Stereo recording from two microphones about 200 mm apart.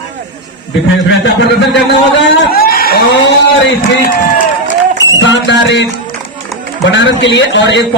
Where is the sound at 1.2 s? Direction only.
60° left (ahead or behind).